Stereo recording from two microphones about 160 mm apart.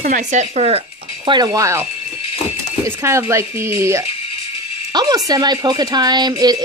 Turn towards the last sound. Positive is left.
turn(degrees=-25)  # may be behind; listen again after turning